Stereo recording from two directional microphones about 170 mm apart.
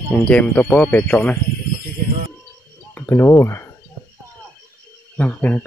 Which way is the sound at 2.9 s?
15° left (ahead or behind).